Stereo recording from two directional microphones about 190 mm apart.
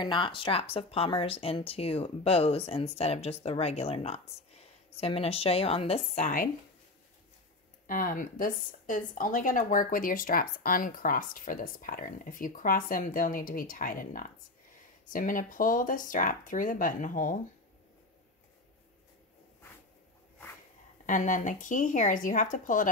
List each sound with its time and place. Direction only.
0.0 s speech: 25° left (ahead or behind); by 6.5 s 45° left (ahead or behind)
7.8 s speech: 45° left (ahead or behind)
21.0 s speech: 40° left (ahead or behind)